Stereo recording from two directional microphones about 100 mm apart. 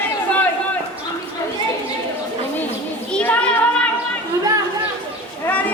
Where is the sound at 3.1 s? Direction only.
10° left (ahead or behind).